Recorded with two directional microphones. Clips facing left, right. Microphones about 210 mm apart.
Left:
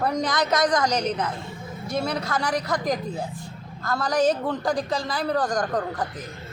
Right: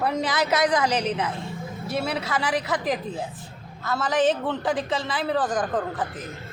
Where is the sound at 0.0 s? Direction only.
5° right (ahead or behind).